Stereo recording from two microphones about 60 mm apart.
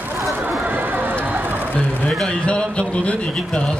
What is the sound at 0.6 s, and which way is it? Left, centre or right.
Run, right.